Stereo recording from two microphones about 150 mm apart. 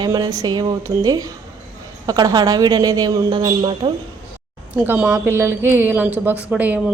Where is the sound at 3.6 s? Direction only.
35° right (ahead or behind).